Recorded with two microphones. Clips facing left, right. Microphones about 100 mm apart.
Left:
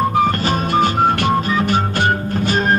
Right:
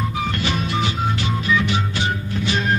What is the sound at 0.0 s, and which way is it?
Music, 50° left (ahead or behind).